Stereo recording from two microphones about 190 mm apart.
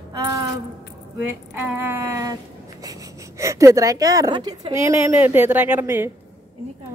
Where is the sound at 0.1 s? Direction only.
20° right (ahead or behind).